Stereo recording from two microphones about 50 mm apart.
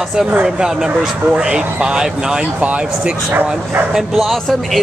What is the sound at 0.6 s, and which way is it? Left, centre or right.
Speech, centre.